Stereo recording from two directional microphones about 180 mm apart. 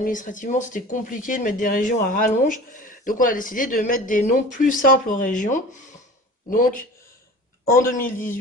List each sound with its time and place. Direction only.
0.0 s speech: 45° left (ahead or behind)